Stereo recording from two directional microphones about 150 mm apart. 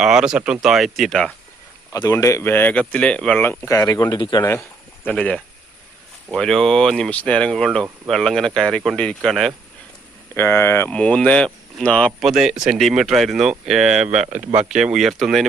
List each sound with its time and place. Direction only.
0.0 s speech: 5° right (ahead or behind)
1.9 s speech: 20° left (ahead or behind)
5.0 s speech: 10° left (ahead or behind)
10.3 s speech: 15° left (ahead or behind)